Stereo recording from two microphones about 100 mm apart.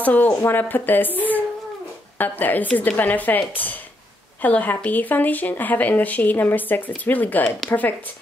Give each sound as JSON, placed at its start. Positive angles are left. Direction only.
{"t": 0.0, "sound": "speech", "side_deg": 15}
{"t": 2.1, "sound": "speech", "side_deg": 20}